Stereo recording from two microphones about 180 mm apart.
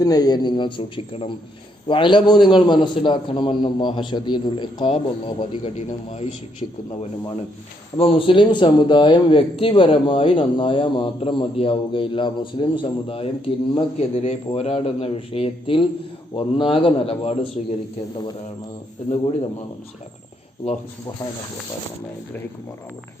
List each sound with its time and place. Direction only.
0.0 s a man's voice: 20° left (ahead or behind)
7.9 s a man's voice: 30° left (ahead or behind)
19.1 s a man's voice: 35° left (ahead or behind)